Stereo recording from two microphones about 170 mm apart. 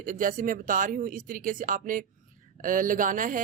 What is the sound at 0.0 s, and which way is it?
Speech, 50° right (ahead or behind).